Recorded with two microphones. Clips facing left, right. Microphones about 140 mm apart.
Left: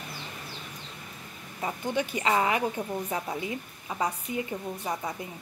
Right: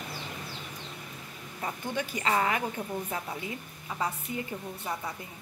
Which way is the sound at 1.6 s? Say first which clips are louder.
Left 4 dB; 15° left (ahead or behind).